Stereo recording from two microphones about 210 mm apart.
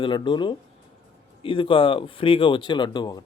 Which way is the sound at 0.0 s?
20° left (ahead or behind).